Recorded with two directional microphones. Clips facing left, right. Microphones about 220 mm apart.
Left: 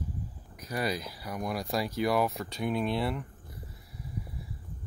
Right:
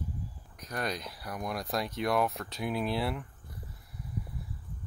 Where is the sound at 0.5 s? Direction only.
5° left (ahead or behind).